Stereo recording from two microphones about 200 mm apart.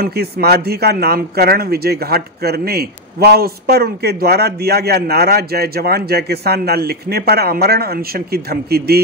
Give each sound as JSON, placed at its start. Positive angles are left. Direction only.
{"t": 0.0, "sound": "a man's voice", "side_deg": -50}